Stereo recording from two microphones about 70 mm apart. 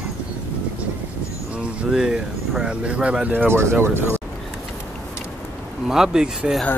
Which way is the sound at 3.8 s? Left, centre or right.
Right.